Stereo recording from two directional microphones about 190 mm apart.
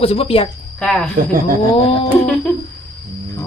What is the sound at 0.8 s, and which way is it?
Speech, 5° left (ahead or behind).